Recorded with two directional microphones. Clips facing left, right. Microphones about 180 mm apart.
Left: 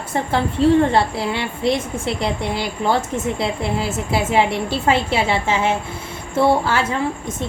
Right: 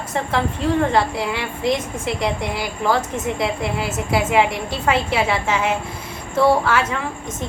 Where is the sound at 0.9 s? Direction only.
30° left (ahead or behind).